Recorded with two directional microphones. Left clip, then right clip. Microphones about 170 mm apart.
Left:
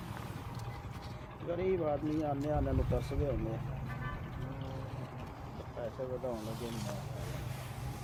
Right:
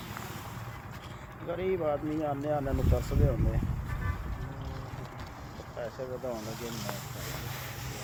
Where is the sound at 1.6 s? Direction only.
30° right (ahead or behind).